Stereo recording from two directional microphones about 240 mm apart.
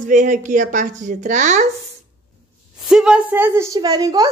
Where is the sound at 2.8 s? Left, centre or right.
Centre.